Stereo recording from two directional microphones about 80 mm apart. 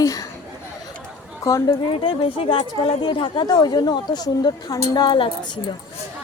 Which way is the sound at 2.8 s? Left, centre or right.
Left.